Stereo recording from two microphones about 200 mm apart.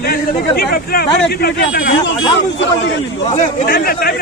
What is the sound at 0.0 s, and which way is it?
Speech, 50° left (ahead or behind).